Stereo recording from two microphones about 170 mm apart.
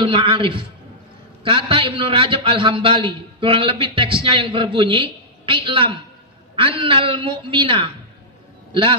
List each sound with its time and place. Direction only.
0.0 s a man's voice: 30° right (ahead or behind)